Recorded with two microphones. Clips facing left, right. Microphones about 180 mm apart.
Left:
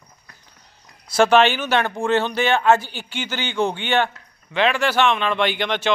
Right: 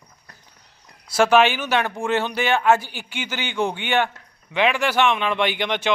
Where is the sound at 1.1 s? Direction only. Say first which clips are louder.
Left 1 dB; 5° right (ahead or behind).